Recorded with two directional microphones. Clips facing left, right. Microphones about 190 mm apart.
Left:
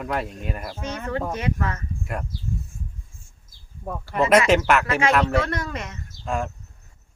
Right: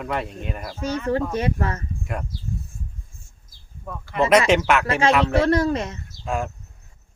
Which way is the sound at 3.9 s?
40° left (ahead or behind).